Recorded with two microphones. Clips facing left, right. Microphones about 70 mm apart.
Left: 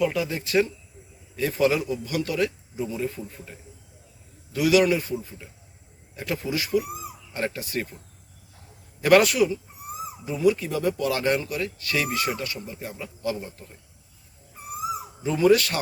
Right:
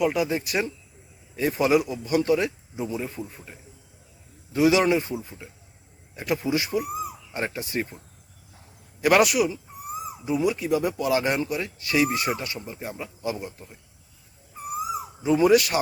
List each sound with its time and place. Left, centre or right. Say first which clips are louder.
0.0 s speech: right 2 dB; centre
9.0 s speech: left 1 dB; centre
15.2 s speech: right 1 dB; centre